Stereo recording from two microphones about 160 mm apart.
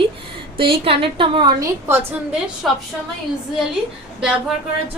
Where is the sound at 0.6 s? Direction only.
35° right (ahead or behind).